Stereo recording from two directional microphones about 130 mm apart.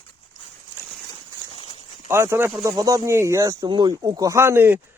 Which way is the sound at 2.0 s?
20° right (ahead or behind).